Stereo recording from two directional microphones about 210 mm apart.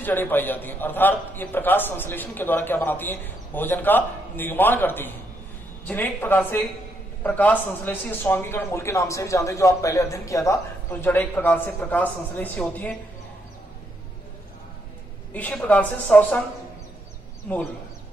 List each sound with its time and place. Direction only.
0.0 s a man's voice: 10° left (ahead or behind)
15.3 s a man's voice: 5° left (ahead or behind)